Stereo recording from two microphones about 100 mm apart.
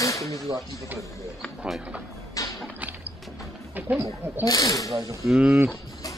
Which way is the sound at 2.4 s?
35° left (ahead or behind).